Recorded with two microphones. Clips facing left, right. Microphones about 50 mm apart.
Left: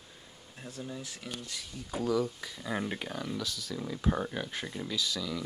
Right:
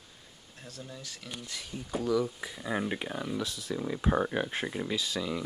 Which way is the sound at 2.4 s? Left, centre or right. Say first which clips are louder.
Right 2 dB; centre.